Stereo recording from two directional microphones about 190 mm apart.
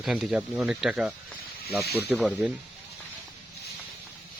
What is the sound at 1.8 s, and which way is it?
Speech, 55° left (ahead or behind).